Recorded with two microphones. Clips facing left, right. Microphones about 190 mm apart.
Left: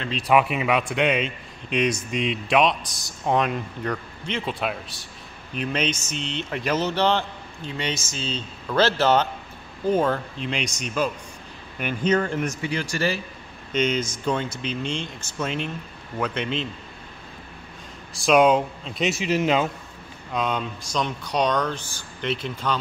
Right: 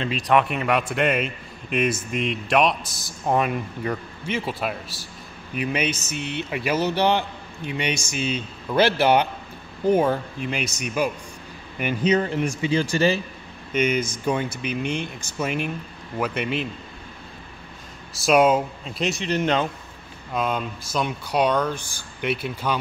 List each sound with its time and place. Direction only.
0.3 s a man's voice: 5° left (ahead or behind)
12.4 s speech: 20° right (ahead or behind)
13.7 s speech: 10° right (ahead or behind)
18.2 s a man's voice: 5° right (ahead or behind)